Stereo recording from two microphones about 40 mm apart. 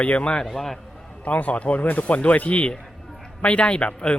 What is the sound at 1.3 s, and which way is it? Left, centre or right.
A man's voice, left.